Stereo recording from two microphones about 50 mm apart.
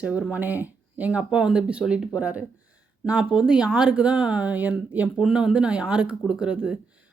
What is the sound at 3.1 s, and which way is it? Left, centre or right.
Speech, centre.